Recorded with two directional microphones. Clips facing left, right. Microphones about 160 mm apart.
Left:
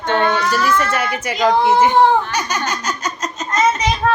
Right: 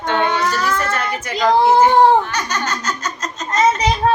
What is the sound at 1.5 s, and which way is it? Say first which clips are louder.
Speech: right 2 dB; 35° right (ahead or behind).